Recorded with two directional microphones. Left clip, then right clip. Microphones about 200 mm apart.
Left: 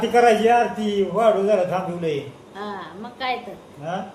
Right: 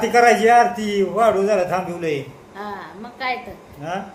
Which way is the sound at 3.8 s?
25° right (ahead or behind).